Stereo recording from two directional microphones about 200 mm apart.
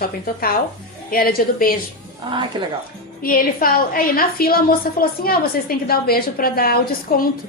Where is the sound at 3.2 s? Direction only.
45° left (ahead or behind).